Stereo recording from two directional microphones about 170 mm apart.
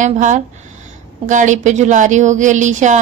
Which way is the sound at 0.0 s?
45° right (ahead or behind).